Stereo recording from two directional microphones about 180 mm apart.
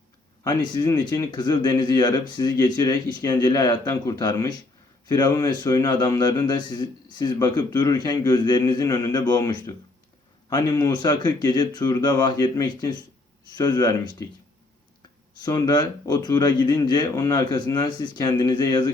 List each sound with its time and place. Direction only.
0.4 s a man's voice: 25° left (ahead or behind)
15.4 s a man's voice: 20° left (ahead or behind)